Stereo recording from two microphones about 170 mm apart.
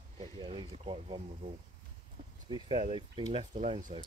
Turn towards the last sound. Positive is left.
turn(degrees=-35)  # may be behind; listen again after turning